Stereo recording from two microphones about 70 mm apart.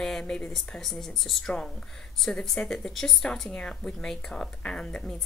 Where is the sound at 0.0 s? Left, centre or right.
Centre.